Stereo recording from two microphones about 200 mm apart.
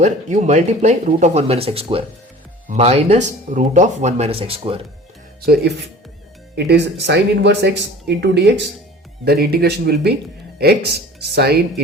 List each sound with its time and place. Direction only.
0.0 s speech: 35° right (ahead or behind)
5.5 s speech: 55° right (ahead or behind)